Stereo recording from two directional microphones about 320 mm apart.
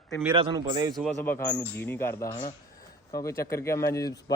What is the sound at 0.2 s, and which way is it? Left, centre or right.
Speech, centre.